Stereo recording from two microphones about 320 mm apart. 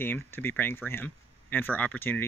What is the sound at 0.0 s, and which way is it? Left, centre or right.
Speech, centre.